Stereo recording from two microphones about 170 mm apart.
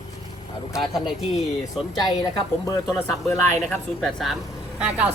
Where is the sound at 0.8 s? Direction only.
Centre (ahead or behind).